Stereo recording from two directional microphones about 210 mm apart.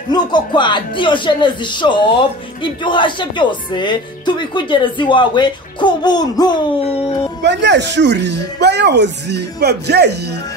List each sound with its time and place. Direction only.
0.1 s a woman's voice: 20° left (ahead or behind)
7.4 s speech: 55° right (ahead or behind)